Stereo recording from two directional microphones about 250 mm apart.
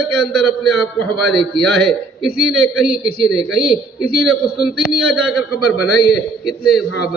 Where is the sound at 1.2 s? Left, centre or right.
Centre.